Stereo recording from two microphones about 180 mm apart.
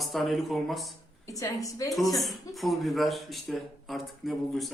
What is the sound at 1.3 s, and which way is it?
Speech, 20° left (ahead or behind).